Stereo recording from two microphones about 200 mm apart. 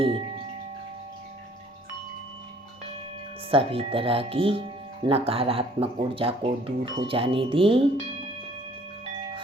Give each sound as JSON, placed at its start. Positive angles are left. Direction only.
{"t": 3.5, "sound": "speech", "side_deg": -25}